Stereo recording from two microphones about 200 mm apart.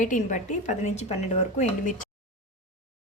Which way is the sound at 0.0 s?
40° left (ahead or behind).